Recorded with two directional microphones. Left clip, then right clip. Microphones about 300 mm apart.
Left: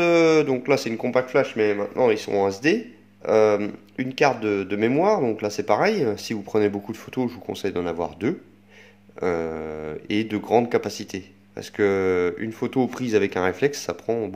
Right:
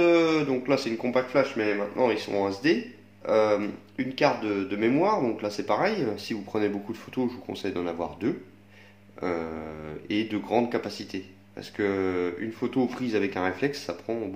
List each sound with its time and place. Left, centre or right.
0.0 s speech: left